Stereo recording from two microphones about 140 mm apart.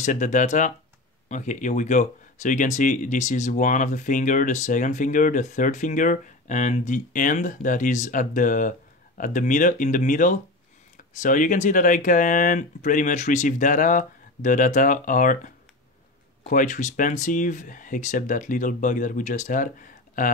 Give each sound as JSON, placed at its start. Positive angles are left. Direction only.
{"t": 0.0, "sound": "speech", "side_deg": 65}